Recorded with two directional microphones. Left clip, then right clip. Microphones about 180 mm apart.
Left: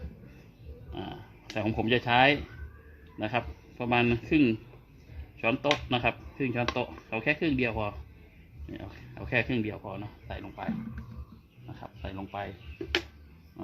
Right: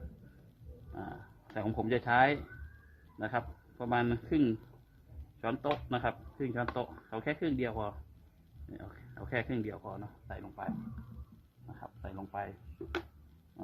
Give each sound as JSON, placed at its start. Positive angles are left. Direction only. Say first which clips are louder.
{"t": 0.9, "sound": "pig", "louder": "left 4 dB", "side_deg": 25}
{"t": 3.2, "sound": "speech", "louder": "left 5 dB", "side_deg": 30}
{"t": 5.9, "sound": "speech", "louder": "left 6 dB", "side_deg": 30}
{"t": 11.8, "sound": "speech", "louder": "left 5 dB", "side_deg": 20}